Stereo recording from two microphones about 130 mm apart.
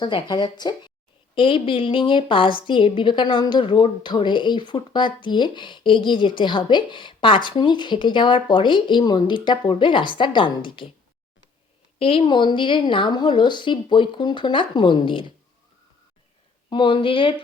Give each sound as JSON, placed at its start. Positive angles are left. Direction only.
{"t": 0.0, "sound": "a woman's voice", "side_deg": 35}
{"t": 11.9, "sound": "a woman's voice", "side_deg": 45}
{"t": 16.6, "sound": "a woman's voice", "side_deg": 40}